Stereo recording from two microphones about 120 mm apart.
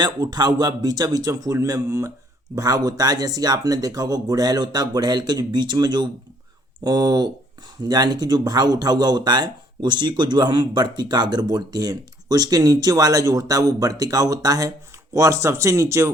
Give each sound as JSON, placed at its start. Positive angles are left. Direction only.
{"t": 0.0, "sound": "speech", "side_deg": -35}